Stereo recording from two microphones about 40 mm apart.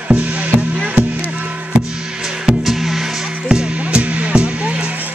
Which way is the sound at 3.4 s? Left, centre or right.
Right.